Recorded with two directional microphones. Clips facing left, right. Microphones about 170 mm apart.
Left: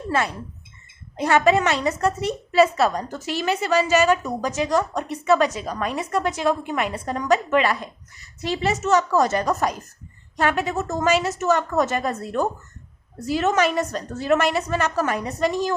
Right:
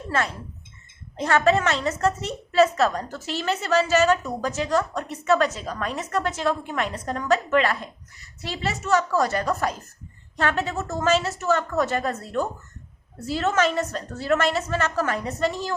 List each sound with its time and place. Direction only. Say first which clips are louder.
0.1 s a woman's voice: left 2 dB; 15° left (ahead or behind)